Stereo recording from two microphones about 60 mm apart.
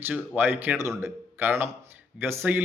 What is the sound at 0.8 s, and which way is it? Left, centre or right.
Speech, right.